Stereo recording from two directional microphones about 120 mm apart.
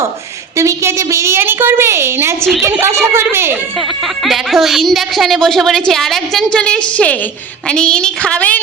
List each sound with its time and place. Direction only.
0.5 s a woman's voice: 25° right (ahead or behind)
3.8 s a woman's voice: centre (ahead or behind)